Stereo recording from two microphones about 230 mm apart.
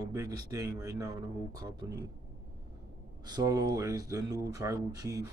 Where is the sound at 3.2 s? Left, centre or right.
Centre.